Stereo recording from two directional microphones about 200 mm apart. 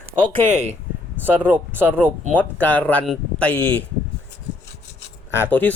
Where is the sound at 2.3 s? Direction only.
10° left (ahead or behind).